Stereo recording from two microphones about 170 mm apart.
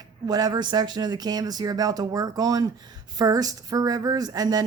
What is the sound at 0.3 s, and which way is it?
Speech, 25° right (ahead or behind).